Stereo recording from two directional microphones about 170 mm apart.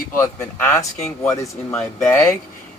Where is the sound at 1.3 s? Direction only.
20° left (ahead or behind).